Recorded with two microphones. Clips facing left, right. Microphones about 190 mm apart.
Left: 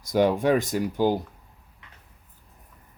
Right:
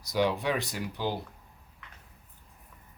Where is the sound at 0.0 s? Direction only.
50° left (ahead or behind).